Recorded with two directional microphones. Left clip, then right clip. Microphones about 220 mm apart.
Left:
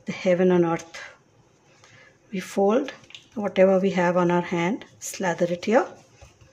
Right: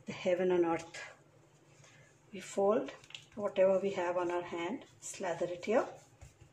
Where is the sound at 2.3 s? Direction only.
35° left (ahead or behind).